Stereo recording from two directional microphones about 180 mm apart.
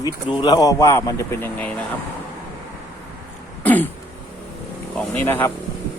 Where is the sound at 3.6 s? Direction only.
10° left (ahead or behind).